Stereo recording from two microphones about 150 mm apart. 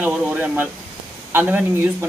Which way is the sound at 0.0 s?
10° right (ahead or behind).